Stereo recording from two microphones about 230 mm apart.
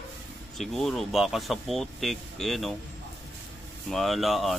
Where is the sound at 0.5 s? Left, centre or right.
Centre.